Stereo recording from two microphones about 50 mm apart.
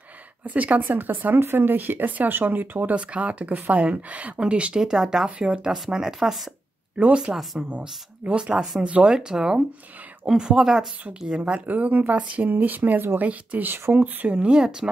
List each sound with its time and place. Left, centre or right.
0.5 s speech: right
1.4 s speech: right
3.0 s speech: right; by 6.5 s centre
7.3 s speech: right
11.7 s speech: right; by 14.9 s centre